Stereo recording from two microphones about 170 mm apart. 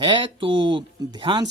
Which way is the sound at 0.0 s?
30° right (ahead or behind).